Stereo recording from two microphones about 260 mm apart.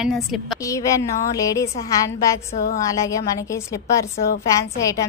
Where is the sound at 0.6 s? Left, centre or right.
Centre.